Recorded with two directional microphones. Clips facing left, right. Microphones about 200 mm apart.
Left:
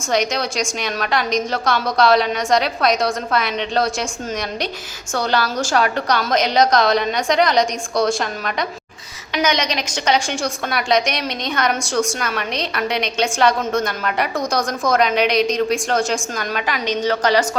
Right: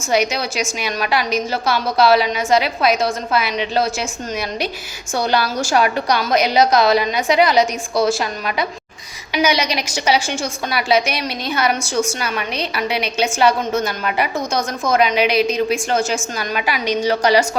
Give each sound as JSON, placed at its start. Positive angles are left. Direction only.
{"t": 0.1, "sound": "a woman's voice", "side_deg": -5}
{"t": 5.1, "sound": "a woman's voice", "side_deg": -10}